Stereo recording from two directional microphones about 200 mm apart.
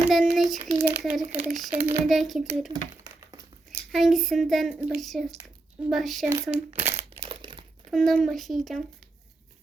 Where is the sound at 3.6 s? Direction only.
Centre (ahead or behind).